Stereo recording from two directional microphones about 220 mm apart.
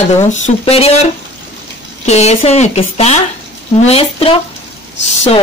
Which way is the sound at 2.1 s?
30° left (ahead or behind).